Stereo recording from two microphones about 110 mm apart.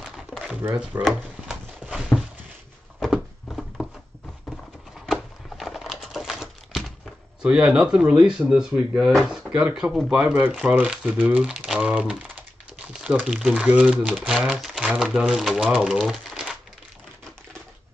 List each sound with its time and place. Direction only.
0.0 s a sound: 5° right (ahead or behind)
0.6 s speech: 15° right (ahead or behind)
1.0 s a sound: 5° right (ahead or behind)
5.0 s crumpling: centre (ahead or behind)
7.4 s speech: 10° right (ahead or behind)
12.0 s typing: 10° right (ahead or behind)
13.5 s speech: 15° right (ahead or behind)
16.0 s typewriter: centre (ahead or behind)